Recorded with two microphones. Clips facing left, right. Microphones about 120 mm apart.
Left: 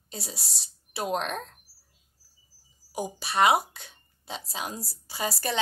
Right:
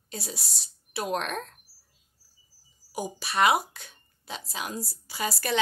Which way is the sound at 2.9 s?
25° left (ahead or behind).